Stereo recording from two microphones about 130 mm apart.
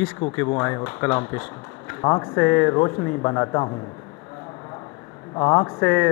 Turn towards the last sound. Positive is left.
turn(degrees=20)  # may be behind; listen again after turning